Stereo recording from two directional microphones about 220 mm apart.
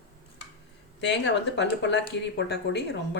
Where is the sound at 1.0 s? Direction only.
50° left (ahead or behind).